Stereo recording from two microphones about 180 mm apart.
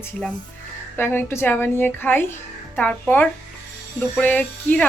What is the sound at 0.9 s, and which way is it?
A woman's voice, 10° left (ahead or behind).